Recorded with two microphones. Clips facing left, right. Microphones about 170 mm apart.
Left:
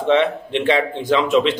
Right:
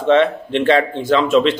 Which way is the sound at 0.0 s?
15° left (ahead or behind).